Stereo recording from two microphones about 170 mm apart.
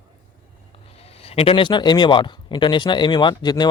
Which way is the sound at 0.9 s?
35° left (ahead or behind).